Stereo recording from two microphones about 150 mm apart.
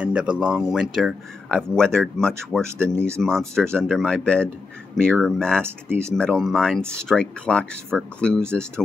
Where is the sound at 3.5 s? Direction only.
5° left (ahead or behind).